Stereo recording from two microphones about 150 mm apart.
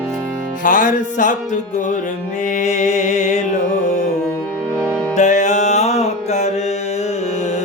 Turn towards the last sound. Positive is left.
turn(degrees=50)  # may be behind; listen again after turning